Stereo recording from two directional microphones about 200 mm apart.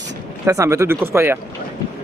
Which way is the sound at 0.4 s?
15° right (ahead or behind).